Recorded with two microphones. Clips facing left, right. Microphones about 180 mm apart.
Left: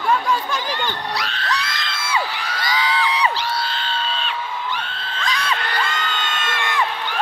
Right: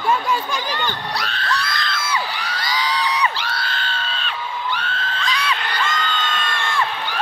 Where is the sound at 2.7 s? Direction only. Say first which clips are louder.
Left 1 dB; 25° left (ahead or behind).